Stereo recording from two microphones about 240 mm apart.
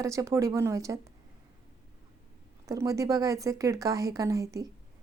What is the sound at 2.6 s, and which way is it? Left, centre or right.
A woman's voice, centre.